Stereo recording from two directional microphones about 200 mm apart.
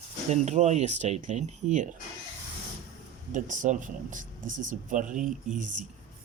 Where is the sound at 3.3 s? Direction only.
40° right (ahead or behind).